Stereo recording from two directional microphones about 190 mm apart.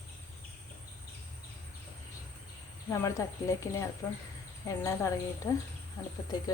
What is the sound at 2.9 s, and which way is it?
A woman's voice, 15° left (ahead or behind).